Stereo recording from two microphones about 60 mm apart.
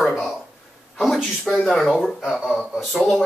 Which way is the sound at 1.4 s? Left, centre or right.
Centre.